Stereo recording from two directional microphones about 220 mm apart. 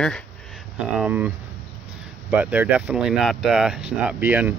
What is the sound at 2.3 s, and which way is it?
Speech, 5° right (ahead or behind).